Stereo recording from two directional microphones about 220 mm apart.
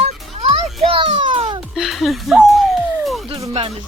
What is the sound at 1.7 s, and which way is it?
Music, centre (ahead or behind).